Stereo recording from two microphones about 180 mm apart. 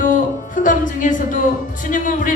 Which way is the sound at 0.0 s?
45° left (ahead or behind).